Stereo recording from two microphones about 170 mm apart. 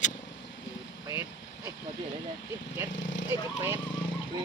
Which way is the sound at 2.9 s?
90° left.